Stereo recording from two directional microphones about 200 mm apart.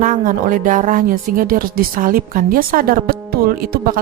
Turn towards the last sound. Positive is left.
turn(degrees=-45)  # may be behind; listen again after turning